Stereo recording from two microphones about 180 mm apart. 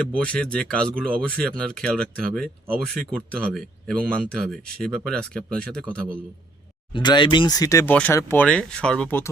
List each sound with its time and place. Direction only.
0.1 s speech: 5° left (ahead or behind)
6.9 s speech: 25° left (ahead or behind)